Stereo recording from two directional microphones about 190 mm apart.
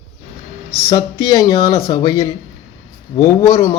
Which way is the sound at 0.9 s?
20° left (ahead or behind).